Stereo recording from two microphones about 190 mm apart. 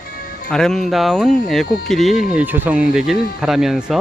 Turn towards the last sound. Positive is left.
turn(degrees=-5)  # may be behind; listen again after turning